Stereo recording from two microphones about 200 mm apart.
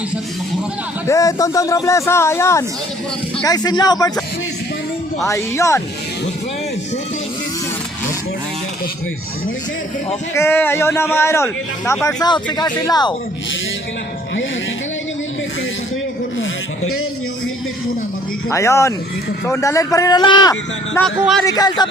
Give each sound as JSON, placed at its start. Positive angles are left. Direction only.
{"t": 1.0, "sound": "speech", "side_deg": 15}
{"t": 5.2, "sound": "speech", "side_deg": 15}
{"t": 10.3, "sound": "speech", "side_deg": 10}
{"t": 16.4, "sound": "a sound", "side_deg": 90}
{"t": 18.5, "sound": "speech", "side_deg": 15}
{"t": 21.0, "sound": "speech", "side_deg": 5}
{"t": 21.4, "sound": "speech", "side_deg": 20}